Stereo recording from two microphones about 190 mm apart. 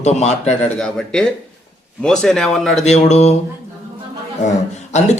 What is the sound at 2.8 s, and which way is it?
Speech, 35° left (ahead or behind).